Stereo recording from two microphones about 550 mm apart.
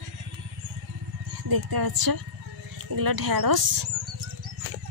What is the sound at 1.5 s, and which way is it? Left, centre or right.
Speech, right.